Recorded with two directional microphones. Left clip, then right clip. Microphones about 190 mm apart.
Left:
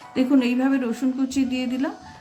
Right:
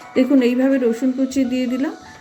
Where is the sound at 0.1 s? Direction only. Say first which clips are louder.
Right 5 dB; 15° right (ahead or behind).